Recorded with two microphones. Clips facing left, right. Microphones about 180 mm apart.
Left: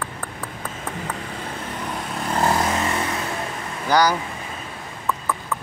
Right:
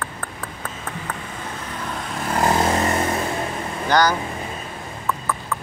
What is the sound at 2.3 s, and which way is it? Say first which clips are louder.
Vehicle: right 1 dB; 15° right (ahead or behind).